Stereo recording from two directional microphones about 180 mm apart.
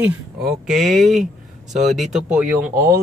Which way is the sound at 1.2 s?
40° right (ahead or behind).